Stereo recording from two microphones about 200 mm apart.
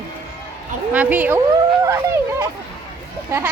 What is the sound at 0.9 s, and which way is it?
Speech, 10° right (ahead or behind).